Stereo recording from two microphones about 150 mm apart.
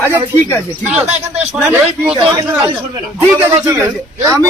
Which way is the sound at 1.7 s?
5° right (ahead or behind).